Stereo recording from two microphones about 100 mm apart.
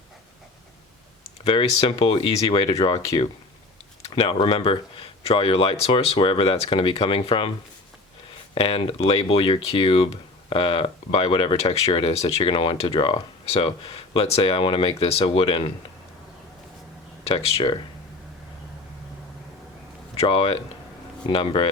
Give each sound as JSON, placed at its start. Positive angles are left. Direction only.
{"t": 1.5, "sound": "speech", "side_deg": 60}
{"t": 4.1, "sound": "speech", "side_deg": 60}
{"t": 8.5, "sound": "speech", "side_deg": 65}
{"t": 9.2, "sound": "speech", "side_deg": 60}
{"t": 15.2, "sound": "speech", "side_deg": 60}
{"t": 17.2, "sound": "speech", "side_deg": 80}
{"t": 20.1, "sound": "speech", "side_deg": 70}